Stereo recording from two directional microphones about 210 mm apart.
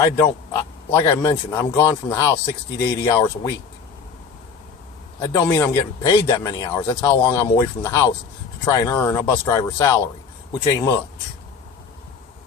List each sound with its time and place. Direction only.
0.0 s a man's voice: 15° left (ahead or behind)
5.2 s a man's voice: 15° left (ahead or behind)